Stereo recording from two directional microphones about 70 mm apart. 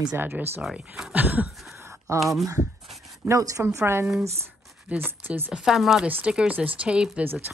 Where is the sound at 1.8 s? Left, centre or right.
Right.